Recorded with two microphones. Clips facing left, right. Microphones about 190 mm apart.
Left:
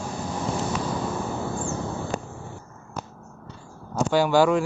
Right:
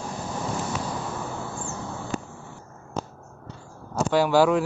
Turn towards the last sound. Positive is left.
turn(degrees=0)  # may be behind; listen again after turning